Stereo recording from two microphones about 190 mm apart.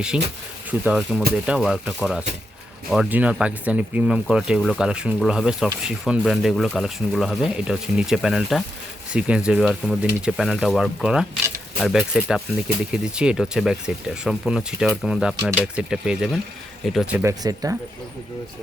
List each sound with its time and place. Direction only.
0.7 s speech: 5° right (ahead or behind)
17.4 s speech: 20° right (ahead or behind)